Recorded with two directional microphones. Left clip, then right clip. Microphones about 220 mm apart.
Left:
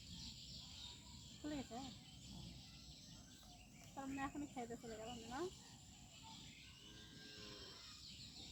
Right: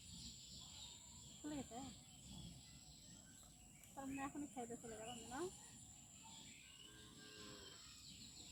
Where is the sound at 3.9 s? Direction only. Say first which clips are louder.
Left 2 dB; 40° left (ahead or behind).